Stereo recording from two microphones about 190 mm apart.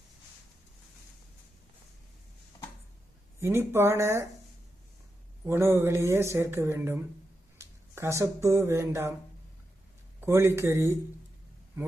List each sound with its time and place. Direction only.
3.4 s speech: 10° right (ahead or behind)
5.5 s speech: 15° right (ahead or behind)
10.2 s speech: 15° right (ahead or behind)